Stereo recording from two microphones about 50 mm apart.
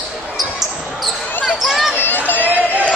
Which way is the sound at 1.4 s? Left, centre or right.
Centre.